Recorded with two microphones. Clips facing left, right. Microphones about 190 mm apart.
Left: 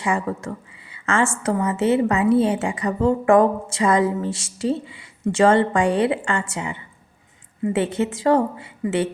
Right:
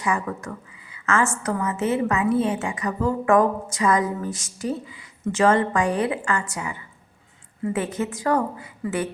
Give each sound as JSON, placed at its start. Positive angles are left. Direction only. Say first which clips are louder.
{"t": 0.0, "sound": "a woman's voice", "louder": "left 2 dB", "side_deg": 25}